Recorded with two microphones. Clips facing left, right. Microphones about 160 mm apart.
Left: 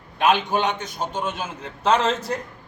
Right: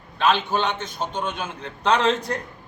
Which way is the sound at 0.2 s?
15° left (ahead or behind).